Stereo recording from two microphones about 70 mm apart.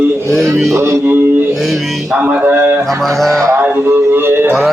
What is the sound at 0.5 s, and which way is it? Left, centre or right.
Speech, centre.